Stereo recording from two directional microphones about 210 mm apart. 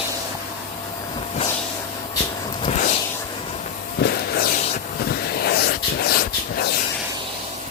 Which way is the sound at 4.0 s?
50° left (ahead or behind).